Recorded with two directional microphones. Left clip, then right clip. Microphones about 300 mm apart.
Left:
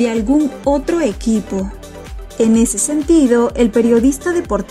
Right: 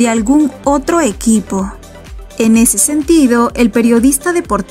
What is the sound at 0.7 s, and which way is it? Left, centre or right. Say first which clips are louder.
Speech: right 2 dB; centre.